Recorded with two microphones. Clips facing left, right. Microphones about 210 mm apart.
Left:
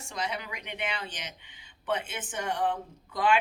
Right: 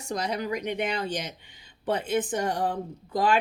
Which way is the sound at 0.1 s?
40° right (ahead or behind).